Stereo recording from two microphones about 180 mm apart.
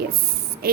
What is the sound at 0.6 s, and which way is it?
Speech, 55° right (ahead or behind).